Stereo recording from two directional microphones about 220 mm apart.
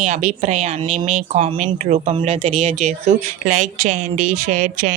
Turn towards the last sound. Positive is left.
turn(degrees=-35)  # may be behind; listen again after turning